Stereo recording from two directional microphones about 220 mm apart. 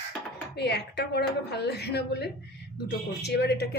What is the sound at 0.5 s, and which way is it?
A woman's voice, 50° left (ahead or behind).